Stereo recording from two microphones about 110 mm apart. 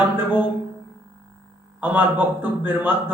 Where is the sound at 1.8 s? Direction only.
15° right (ahead or behind).